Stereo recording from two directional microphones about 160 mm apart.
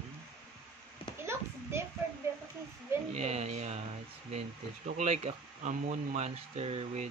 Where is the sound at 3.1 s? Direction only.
40° right (ahead or behind).